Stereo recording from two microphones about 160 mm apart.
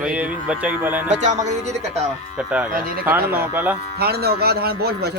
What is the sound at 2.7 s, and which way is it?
Speech, 60° right (ahead or behind).